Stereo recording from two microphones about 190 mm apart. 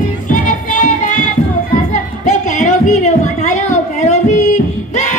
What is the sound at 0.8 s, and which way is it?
Music, 40° left (ahead or behind).